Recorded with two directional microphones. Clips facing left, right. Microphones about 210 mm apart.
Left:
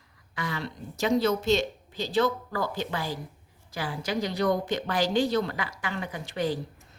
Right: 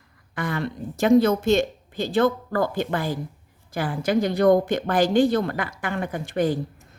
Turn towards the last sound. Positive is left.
turn(degrees=-50)  # may be behind; listen again after turning